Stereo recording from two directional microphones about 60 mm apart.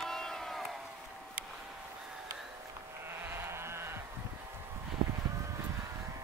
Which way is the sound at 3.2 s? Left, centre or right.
Right.